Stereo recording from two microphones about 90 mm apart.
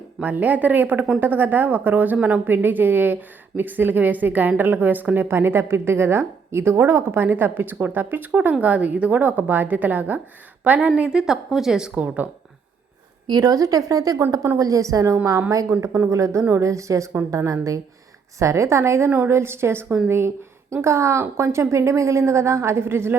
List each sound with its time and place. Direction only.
0.2 s a woman's voice: 20° right (ahead or behind)
13.2 s a woman's voice: 45° right (ahead or behind); by 23.1 s 25° right (ahead or behind)